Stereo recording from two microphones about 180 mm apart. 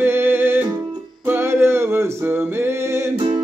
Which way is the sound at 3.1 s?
25° right (ahead or behind).